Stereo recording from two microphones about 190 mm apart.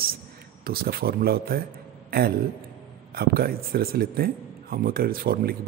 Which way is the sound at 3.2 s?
55° right (ahead or behind).